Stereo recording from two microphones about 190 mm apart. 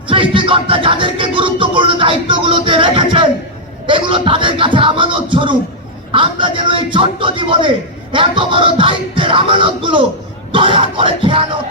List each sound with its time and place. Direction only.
0.1 s music: 25° right (ahead or behind)